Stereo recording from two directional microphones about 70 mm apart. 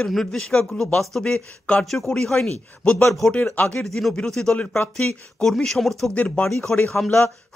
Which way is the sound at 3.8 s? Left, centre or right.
Centre.